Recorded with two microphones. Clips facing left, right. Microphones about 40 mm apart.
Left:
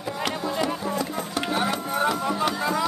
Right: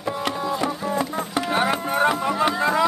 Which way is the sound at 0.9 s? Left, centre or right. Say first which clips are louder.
Right 3 dB; right.